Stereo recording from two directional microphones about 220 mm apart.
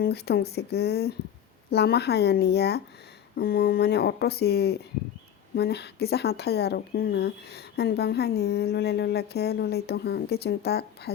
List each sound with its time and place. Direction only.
0.0 s speech: 45° left (ahead or behind)